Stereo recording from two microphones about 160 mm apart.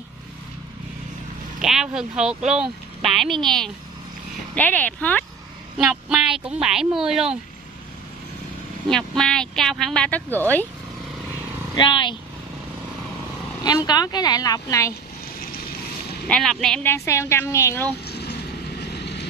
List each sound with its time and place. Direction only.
1.6 s a woman's voice: 5° right (ahead or behind)
5.8 s speech: 5° right (ahead or behind)
8.9 s speech: 5° left (ahead or behind)
11.7 s speech: 30° left (ahead or behind)
13.7 s speech: 25° left (ahead or behind)
16.3 s speech: 5° left (ahead or behind)
16.8 s a woman's voice: 15° left (ahead or behind)
18.0 s vehicle: 90° left